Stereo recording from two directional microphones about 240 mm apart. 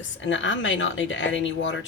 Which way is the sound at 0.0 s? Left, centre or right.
Left.